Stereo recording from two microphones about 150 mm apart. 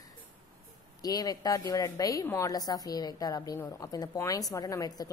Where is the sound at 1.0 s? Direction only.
25° left (ahead or behind).